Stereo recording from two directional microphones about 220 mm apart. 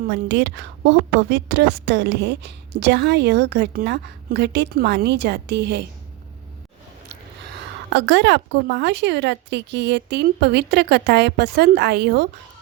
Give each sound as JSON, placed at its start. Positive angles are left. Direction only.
{"t": 0.1, "sound": "a woman's voice", "side_deg": -55}
{"t": 7.5, "sound": "a woman's voice", "side_deg": -55}